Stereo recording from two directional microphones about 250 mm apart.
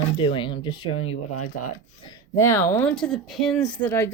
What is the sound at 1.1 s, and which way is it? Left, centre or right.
Speech, left.